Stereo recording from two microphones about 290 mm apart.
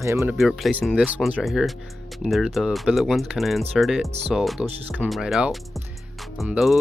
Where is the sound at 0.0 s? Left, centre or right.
Centre.